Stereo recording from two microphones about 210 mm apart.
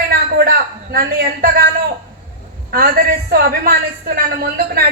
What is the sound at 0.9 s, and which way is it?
Speech, 45° right (ahead or behind).